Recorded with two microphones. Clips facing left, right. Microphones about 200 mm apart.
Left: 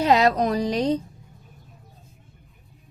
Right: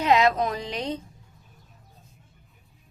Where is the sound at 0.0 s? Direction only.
35° left (ahead or behind).